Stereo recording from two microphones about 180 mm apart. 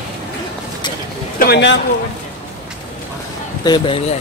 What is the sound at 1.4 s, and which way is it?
Speech, 70° left (ahead or behind).